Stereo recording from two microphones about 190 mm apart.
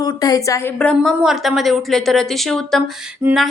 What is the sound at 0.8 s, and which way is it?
A woman's voice, 5° left (ahead or behind).